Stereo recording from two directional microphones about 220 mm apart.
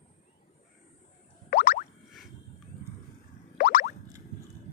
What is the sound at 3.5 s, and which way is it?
Boing, 40° left (ahead or behind).